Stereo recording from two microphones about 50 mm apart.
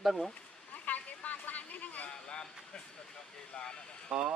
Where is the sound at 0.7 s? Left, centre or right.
Left.